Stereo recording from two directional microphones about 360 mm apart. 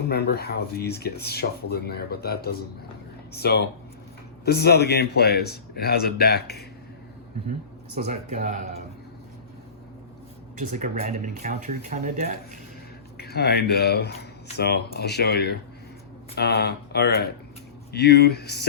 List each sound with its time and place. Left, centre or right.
0.1 s speech: left
8.0 s speech: centre
10.6 s speech: right
13.1 s speech: left